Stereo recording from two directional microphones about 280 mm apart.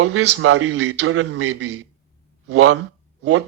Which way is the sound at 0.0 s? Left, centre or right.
Right.